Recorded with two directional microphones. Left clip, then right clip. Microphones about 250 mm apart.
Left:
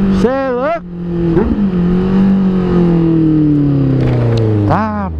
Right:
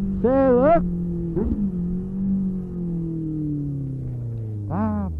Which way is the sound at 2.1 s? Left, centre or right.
Centre.